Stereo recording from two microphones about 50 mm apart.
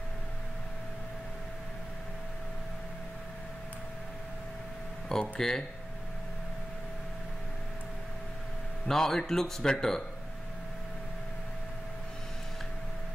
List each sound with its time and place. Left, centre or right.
5.1 s speech: centre
8.8 s speech: centre